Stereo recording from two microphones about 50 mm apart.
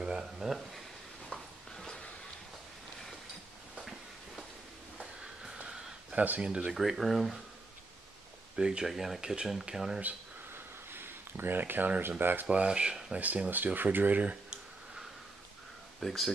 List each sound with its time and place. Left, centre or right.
0.2 s speech: centre
1.3 s a sound: centre
6.1 s speech: right
6.4 s speech: right
6.7 s speech: centre
8.5 s speech: centre
8.8 s speech: centre
10.5 s a sound: right
12.2 s speech: right
12.4 s speech: right
13.2 s speech: right
16.0 s speech: centre